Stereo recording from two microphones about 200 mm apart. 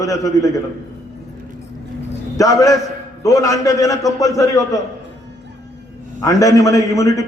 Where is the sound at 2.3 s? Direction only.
15° left (ahead or behind).